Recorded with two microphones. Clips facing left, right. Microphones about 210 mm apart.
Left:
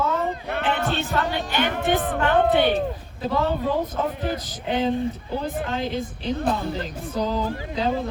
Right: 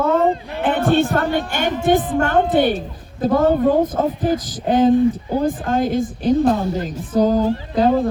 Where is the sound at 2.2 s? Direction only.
45° right (ahead or behind).